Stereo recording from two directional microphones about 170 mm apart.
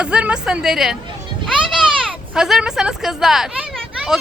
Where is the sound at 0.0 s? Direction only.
5° right (ahead or behind).